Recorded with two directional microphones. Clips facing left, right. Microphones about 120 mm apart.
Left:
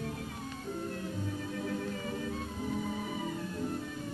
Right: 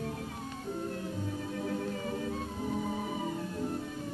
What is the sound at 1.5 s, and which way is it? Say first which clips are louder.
Music: right 2 dB; 35° right (ahead or behind).